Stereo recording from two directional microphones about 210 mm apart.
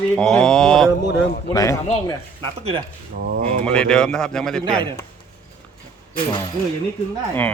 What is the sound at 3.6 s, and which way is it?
A man's voice, 5° left (ahead or behind).